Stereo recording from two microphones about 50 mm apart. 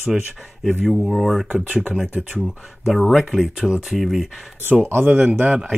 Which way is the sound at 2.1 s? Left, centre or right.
Right.